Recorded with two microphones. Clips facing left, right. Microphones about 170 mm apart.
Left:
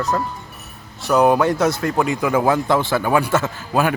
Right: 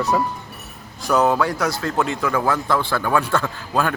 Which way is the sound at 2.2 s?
15° left (ahead or behind).